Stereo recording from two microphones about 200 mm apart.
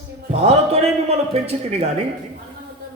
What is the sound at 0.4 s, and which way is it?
A man's voice, 30° right (ahead or behind).